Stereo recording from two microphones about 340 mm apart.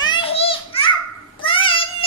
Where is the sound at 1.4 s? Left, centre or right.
Centre.